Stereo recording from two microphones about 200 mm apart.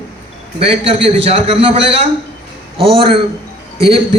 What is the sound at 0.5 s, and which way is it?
A man's voice, 30° right (ahead or behind).